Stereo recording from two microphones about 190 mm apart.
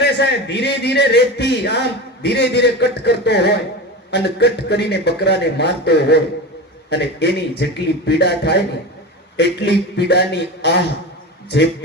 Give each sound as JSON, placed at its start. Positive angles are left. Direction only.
{"t": 0.0, "sound": "a man's voice", "side_deg": 65}